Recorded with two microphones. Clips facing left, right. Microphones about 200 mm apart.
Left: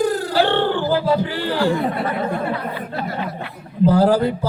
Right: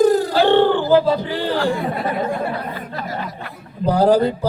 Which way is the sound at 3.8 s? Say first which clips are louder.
Left 1 dB; 20° right (ahead or behind).